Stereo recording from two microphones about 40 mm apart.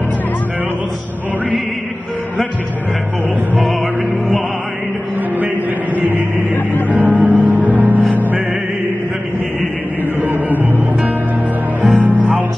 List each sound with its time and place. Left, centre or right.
5.9 s music: right
10.2 s music: right
11.8 s music: right